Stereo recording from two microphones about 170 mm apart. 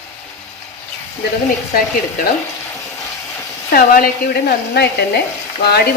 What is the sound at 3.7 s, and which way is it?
Sizzle, 60° left (ahead or behind).